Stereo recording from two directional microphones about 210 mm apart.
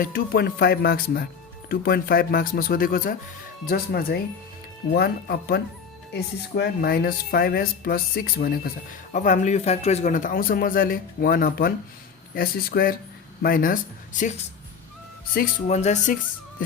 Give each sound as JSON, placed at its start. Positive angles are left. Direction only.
{"t": 0.0, "sound": "speech", "side_deg": 45}